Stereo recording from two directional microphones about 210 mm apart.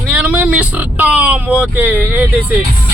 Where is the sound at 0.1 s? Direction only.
5° right (ahead or behind).